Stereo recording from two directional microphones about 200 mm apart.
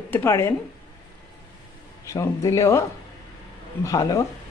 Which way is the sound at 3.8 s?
20° left (ahead or behind).